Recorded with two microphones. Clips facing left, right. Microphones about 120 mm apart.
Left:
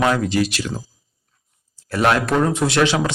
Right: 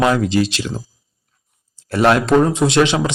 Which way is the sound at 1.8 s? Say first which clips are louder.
Right 4 dB; 25° right (ahead or behind).